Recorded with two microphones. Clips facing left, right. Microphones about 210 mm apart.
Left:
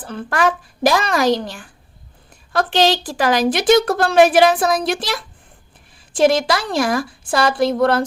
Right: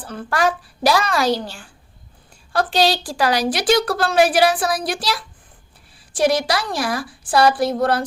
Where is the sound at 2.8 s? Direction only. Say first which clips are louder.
Left 2 dB; 20° left (ahead or behind).